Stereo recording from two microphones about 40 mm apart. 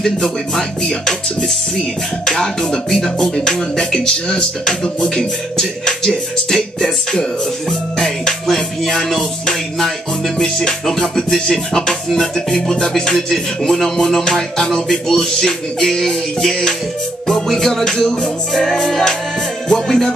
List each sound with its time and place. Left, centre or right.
0.0 s music: centre